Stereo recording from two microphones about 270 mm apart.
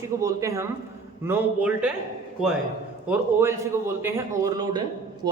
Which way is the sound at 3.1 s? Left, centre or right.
Centre.